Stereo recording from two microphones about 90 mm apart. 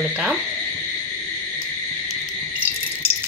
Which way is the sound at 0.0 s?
5° right (ahead or behind).